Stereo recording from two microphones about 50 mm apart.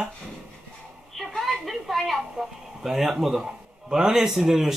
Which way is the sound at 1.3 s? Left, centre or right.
Centre.